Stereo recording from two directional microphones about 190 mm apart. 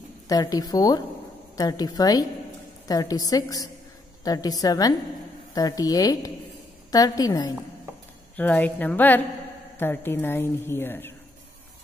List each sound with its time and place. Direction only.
0.3 s a woman's voice: 20° left (ahead or behind)
8.4 s a woman's voice: 10° left (ahead or behind)